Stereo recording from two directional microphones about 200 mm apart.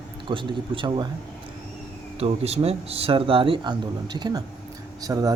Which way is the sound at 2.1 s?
30° right (ahead or behind).